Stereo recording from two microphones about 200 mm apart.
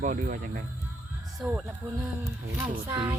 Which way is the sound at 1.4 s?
5° right (ahead or behind).